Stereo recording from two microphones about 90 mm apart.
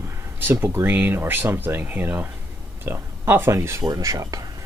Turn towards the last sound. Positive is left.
turn(degrees=-35)  # may be behind; listen again after turning